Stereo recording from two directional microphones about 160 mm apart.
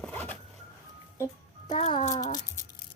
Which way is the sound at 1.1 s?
20° left (ahead or behind).